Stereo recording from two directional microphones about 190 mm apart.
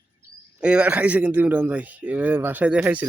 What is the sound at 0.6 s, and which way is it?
Speech, 5° right (ahead or behind).